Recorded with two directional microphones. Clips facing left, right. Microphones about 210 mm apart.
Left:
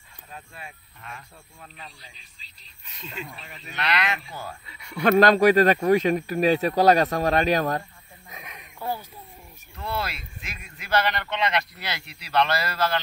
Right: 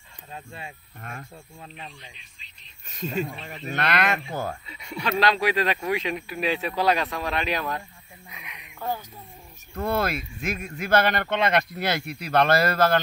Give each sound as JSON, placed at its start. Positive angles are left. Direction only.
{"t": 0.3, "sound": "speech", "side_deg": -25}
{"t": 1.0, "sound": "speech", "side_deg": -50}
{"t": 2.0, "sound": "radio", "side_deg": 35}
{"t": 2.9, "sound": "speech", "side_deg": -45}
{"t": 4.6, "sound": "a sound", "side_deg": -20}
{"t": 5.2, "sound": "speech", "side_deg": 45}
{"t": 8.3, "sound": "a sound", "side_deg": 45}
{"t": 8.7, "sound": "a sound", "side_deg": 10}
{"t": 9.8, "sound": "speech", "side_deg": -50}